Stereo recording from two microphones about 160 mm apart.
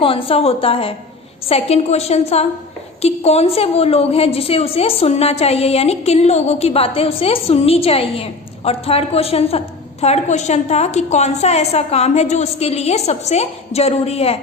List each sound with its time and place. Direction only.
0.0 s a woman's voice: 35° left (ahead or behind)